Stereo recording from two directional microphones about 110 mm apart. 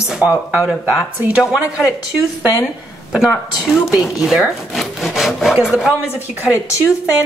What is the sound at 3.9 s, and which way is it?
A woman's voice, 5° right (ahead or behind).